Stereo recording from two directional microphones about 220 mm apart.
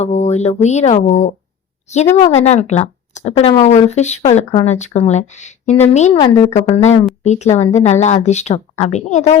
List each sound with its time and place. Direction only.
0.0 s speech: 30° left (ahead or behind)
6.1 s a woman's voice: 20° left (ahead or behind)